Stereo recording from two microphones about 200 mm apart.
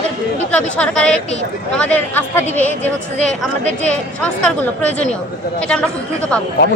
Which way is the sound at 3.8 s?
5° left (ahead or behind).